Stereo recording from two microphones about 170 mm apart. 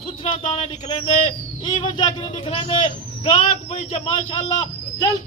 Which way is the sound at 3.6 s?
40° left (ahead or behind).